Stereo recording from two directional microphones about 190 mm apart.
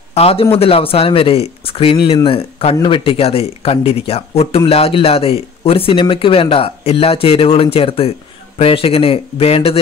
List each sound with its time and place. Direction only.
0.1 s speech: 30° left (ahead or behind)